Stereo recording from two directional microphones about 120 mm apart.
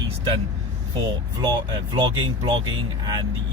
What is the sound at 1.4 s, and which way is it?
Speech, 40° right (ahead or behind).